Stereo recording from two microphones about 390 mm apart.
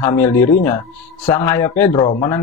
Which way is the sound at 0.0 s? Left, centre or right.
Centre.